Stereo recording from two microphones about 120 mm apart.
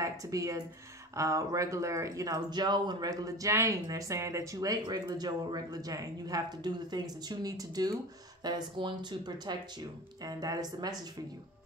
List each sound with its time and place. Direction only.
0.0 s speech: 30° right (ahead or behind)